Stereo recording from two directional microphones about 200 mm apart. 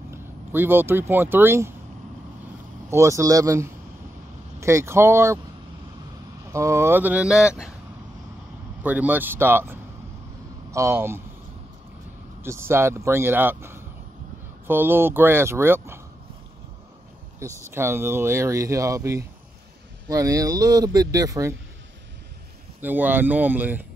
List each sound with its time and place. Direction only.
0.1 s speech: 10° right (ahead or behind)
2.9 s speech: 15° right (ahead or behind)
6.5 s speech: 15° right (ahead or behind)
8.8 s speech: 10° right (ahead or behind)
12.4 s speech: 10° right (ahead or behind)
17.6 s speech: 10° right (ahead or behind)
22.8 s speech: 10° right (ahead or behind)